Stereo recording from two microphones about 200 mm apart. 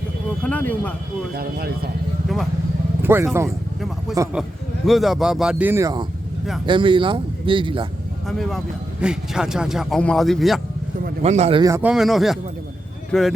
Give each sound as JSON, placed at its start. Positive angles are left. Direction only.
{"t": 0.4, "sound": "speech", "side_deg": 5}
{"t": 1.4, "sound": "speech", "side_deg": -50}
{"t": 3.0, "sound": "vehicle", "side_deg": -10}
{"t": 4.1, "sound": "a man's voice", "side_deg": -15}
{"t": 4.9, "sound": "a man's voice", "side_deg": 0}
{"t": 8.3, "sound": "a man's voice", "side_deg": 0}
{"t": 11.2, "sound": "speech", "side_deg": -30}
{"t": 11.6, "sound": "a man's voice", "side_deg": -10}